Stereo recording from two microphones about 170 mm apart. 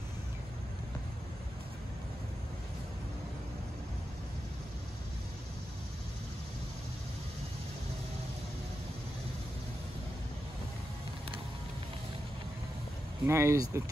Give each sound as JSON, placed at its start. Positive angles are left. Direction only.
{"t": 13.2, "sound": "speech", "side_deg": -15}